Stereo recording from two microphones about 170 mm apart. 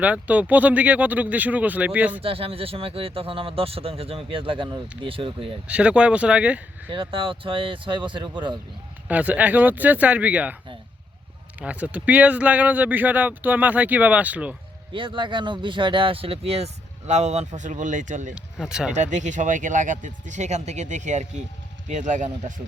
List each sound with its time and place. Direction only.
0.0 s speech: 10° right (ahead or behind)
2.2 s speech: 35° right (ahead or behind)
5.6 s speech: 5° right (ahead or behind)
6.9 s speech: 30° right (ahead or behind)
9.0 s speech: 10° right (ahead or behind)
11.6 s speech: 10° right (ahead or behind)
14.9 s speech: 30° right (ahead or behind); by 18.3 s 45° right (ahead or behind)
18.3 s speech: 5° right (ahead or behind)
19.1 s speech: 45° right (ahead or behind)